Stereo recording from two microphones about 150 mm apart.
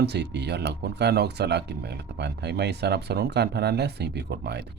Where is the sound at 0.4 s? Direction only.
90° right.